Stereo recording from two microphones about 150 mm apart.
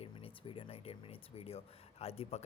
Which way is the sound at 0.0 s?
40° left (ahead or behind).